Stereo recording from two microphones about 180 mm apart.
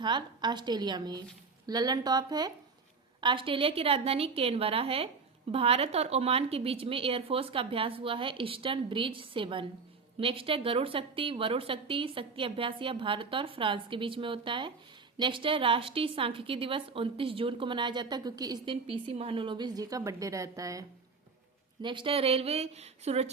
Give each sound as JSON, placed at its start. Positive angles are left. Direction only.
{"t": 0.0, "sound": "a woman's voice", "side_deg": -25}